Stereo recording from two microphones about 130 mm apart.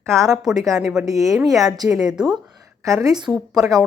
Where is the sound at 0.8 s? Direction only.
5° right (ahead or behind).